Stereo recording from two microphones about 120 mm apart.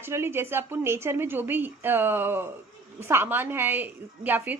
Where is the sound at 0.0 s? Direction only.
20° right (ahead or behind).